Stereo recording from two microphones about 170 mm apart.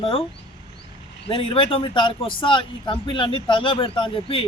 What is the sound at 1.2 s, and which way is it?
Speech, 35° left (ahead or behind).